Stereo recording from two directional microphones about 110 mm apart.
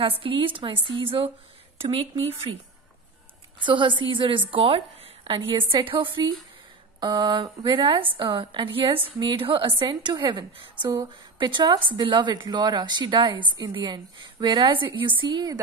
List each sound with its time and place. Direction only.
0.0 s a woman's voice: 55° right (ahead or behind)
3.6 s a woman's voice: 50° right (ahead or behind)